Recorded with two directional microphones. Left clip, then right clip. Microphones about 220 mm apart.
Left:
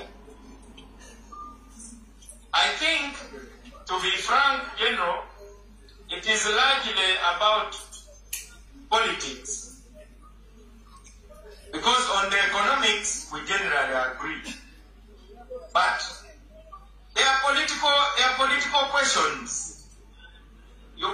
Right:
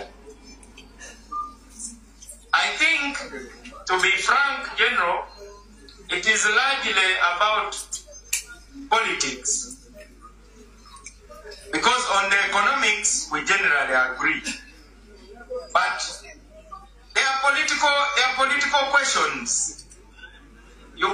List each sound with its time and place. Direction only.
2.5 s a sound: 30° right (ahead or behind)
3.8 s a man's voice: 30° right (ahead or behind)
8.8 s a man's voice: 30° right (ahead or behind)
11.4 s a sound: 30° right (ahead or behind)
15.7 s a man's voice: 30° right (ahead or behind)
17.1 s speech: 30° right (ahead or behind)